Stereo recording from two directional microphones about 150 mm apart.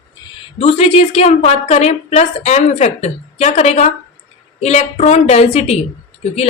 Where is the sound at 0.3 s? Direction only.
40° left (ahead or behind).